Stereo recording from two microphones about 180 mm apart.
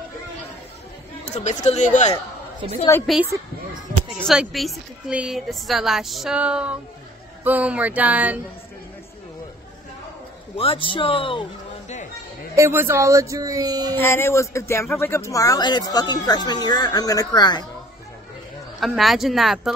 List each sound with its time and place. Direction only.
1.2 s speech: 40° left (ahead or behind)
3.1 s a woman's voice: centre (ahead or behind)
10.6 s speech: 30° left (ahead or behind)
12.5 s speech: 15° right (ahead or behind)
13.9 s speech: 15° left (ahead or behind)
18.8 s a woman's voice: centre (ahead or behind)